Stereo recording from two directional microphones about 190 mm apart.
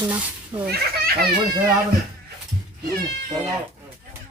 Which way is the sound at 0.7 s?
55° right (ahead or behind).